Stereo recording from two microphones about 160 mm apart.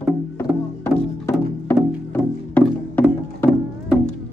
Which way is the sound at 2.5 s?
10° left (ahead or behind).